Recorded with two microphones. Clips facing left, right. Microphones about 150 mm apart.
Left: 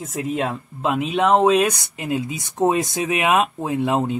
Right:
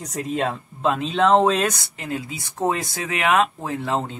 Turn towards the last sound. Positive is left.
turn(degrees=15)  # may be behind; listen again after turning